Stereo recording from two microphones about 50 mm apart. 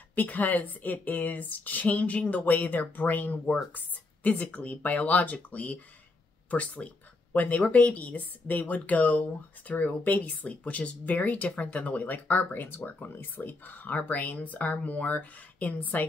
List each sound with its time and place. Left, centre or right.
0.1 s speech: left